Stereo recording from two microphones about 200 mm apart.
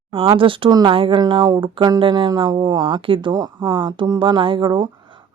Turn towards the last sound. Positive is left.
turn(degrees=-25)  # may be behind; listen again after turning